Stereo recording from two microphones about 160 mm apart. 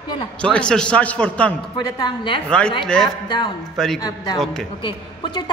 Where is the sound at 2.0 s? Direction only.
30° left (ahead or behind).